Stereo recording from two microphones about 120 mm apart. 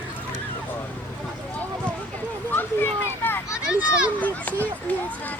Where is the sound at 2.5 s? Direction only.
15° left (ahead or behind).